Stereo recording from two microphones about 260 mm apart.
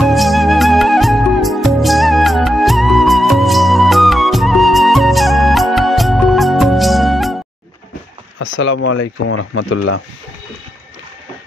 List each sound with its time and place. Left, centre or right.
0.0 s music: centre
8.4 s speech: left